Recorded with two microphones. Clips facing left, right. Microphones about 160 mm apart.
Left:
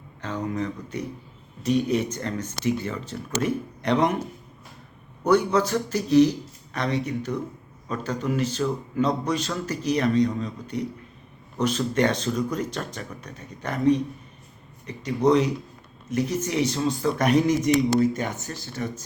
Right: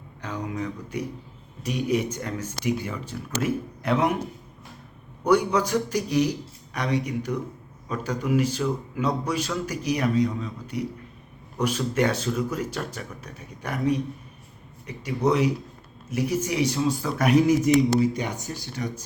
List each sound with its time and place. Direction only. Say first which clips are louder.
0.2 s speech: left 3 dB; 10° right (ahead or behind)
5.2 s speech: left 1 dB; 10° right (ahead or behind)
18.0 s speech: left 1 dB; 50° left (ahead or behind)
18.3 s speech: even; 15° right (ahead or behind)